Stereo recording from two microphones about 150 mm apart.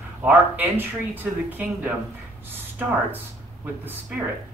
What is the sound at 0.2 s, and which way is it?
Speech, 15° right (ahead or behind).